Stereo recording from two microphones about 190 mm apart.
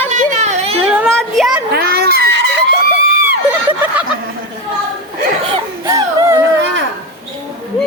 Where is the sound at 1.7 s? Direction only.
55° right (ahead or behind).